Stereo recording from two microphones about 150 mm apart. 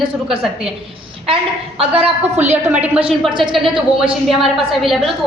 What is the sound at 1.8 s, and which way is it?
Speech, 45° right (ahead or behind).